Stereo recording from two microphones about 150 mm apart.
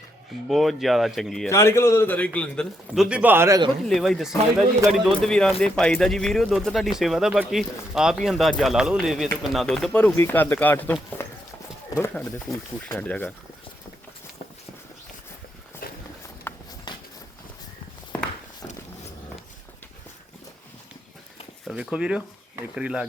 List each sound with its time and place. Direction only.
0.4 s speech: centre (ahead or behind)
1.5 s a man's voice: 20° left (ahead or behind); by 3.6 s 15° right (ahead or behind)
3.8 s a man's voice: centre (ahead or behind)
11.9 s a man's voice: 15° left (ahead or behind)
15.8 s walk: 85° left
16.5 s a sound: 15° left (ahead or behind)
16.9 s a sound: 30° left (ahead or behind)
18.1 s walk: 10° left (ahead or behind)
21.6 s speech: centre (ahead or behind)